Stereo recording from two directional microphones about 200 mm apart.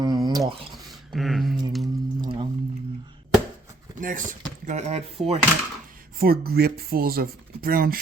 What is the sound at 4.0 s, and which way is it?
Speech, 40° right (ahead or behind).